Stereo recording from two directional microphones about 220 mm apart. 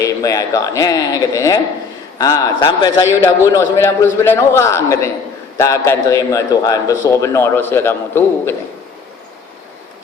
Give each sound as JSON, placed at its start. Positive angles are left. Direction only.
{"t": 0.0, "sound": "a man's voice", "side_deg": 15}